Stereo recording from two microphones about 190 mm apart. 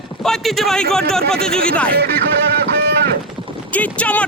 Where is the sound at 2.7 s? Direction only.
60° right (ahead or behind).